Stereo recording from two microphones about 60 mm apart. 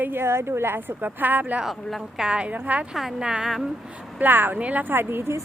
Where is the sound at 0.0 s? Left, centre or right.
Right.